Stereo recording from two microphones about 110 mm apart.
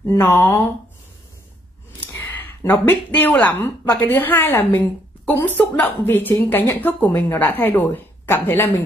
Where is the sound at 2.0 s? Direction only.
20° left (ahead or behind).